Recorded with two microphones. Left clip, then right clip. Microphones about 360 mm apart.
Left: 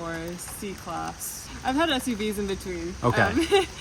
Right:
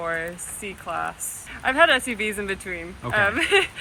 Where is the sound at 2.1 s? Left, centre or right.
Right.